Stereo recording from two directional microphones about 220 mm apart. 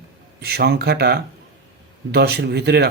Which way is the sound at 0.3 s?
45° right (ahead or behind).